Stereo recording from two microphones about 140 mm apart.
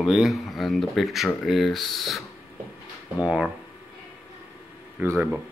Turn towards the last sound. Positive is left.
turn(degrees=-15)  # may be behind; listen again after turning